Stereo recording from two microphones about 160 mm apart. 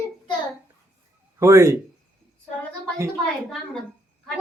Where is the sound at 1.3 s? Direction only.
15° right (ahead or behind).